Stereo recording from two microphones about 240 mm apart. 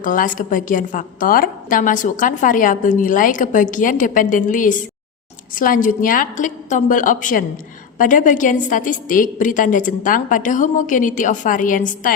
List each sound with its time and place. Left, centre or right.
0.0 s a woman's voice: left